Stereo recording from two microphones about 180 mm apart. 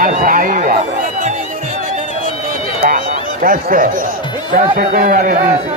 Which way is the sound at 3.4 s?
50° right (ahead or behind).